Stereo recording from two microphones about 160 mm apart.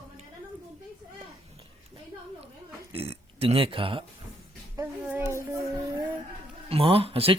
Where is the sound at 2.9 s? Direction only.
35° right (ahead or behind).